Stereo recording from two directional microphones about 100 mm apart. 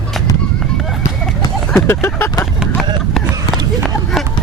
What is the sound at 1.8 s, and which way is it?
Vehicle, 25° left (ahead or behind).